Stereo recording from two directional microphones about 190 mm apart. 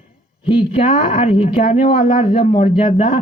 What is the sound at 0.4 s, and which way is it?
Speech, 30° left (ahead or behind).